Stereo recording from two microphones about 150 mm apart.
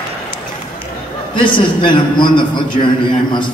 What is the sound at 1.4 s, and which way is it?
A man's voice, 35° left (ahead or behind).